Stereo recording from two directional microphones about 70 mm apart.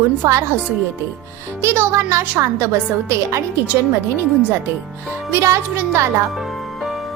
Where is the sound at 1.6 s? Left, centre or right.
Right.